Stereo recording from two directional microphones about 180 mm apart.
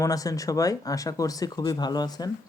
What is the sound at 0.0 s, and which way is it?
Speech, 20° left (ahead or behind).